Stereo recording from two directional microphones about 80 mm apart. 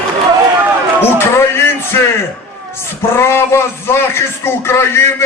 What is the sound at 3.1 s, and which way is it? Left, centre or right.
A man's voice, left.